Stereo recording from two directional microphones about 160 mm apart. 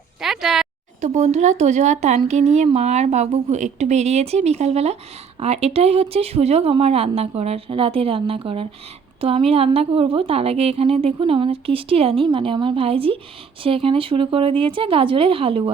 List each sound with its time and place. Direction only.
0.2 s speech: centre (ahead or behind)
1.0 s a woman's voice: 45° right (ahead or behind)